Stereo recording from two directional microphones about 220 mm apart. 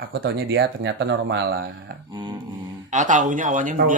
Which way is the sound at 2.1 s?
20° right (ahead or behind).